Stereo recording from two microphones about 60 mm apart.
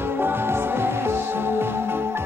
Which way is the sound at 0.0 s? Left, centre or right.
Right.